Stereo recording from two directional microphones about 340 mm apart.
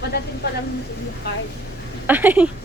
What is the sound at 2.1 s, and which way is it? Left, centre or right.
Speech, centre.